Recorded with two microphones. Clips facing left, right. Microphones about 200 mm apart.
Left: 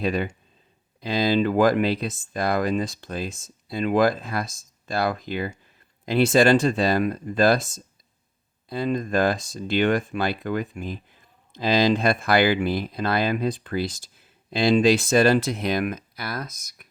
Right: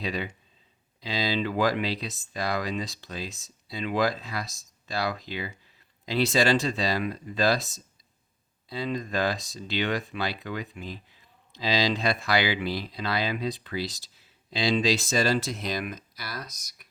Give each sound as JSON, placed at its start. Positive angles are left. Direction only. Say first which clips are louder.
{"t": 0.0, "sound": "speech", "louder": "left 7 dB", "side_deg": 50}